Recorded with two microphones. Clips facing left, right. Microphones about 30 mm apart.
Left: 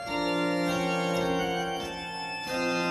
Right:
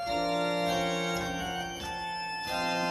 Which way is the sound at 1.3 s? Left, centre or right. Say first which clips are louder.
Left 6 dB; left.